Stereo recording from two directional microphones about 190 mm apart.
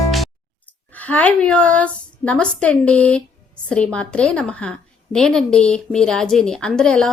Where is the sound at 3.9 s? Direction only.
5° left (ahead or behind).